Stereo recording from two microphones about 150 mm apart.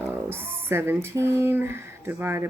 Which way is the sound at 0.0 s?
15° right (ahead or behind).